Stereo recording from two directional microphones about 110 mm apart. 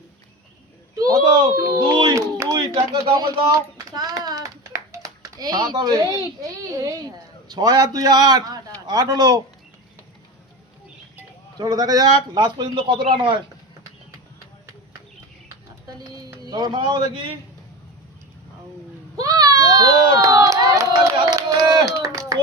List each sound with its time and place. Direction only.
0.9 s a sound: 35° right (ahead or behind)
1.8 s a sound: 45° right (ahead or behind)
6.4 s a child's voice: 30° right (ahead or behind)
11.5 s a man's voice: 35° right (ahead or behind)
16.2 s speech: 40° right (ahead or behind)
19.1 s crowd: 35° right (ahead or behind)